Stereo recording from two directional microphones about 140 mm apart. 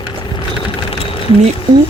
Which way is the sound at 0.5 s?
40° left (ahead or behind).